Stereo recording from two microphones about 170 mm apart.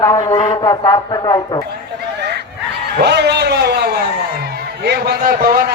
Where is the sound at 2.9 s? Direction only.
80° right; by 5.7 s 60° right (ahead or behind).